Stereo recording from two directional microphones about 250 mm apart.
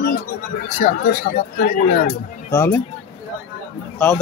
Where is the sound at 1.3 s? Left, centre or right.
Left.